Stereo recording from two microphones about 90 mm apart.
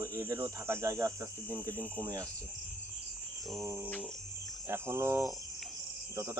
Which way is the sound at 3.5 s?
30° right (ahead or behind).